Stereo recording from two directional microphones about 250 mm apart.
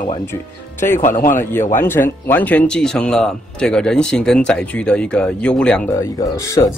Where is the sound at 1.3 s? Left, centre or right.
Centre.